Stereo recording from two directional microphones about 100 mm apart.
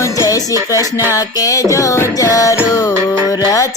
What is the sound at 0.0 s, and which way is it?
Music, 35° left (ahead or behind).